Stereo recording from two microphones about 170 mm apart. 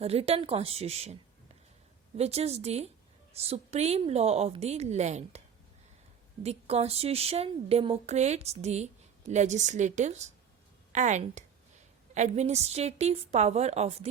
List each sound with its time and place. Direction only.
0.0 s a woman's voice: 35° right (ahead or behind)
2.1 s a woman's voice: 35° right (ahead or behind)
6.4 s a woman's voice: 40° right (ahead or behind)